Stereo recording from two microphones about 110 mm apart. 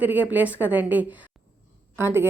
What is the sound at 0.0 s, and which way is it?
A woman's voice, 15° right (ahead or behind).